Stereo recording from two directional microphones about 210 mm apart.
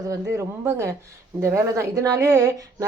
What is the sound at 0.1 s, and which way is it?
A woman's voice, 15° right (ahead or behind).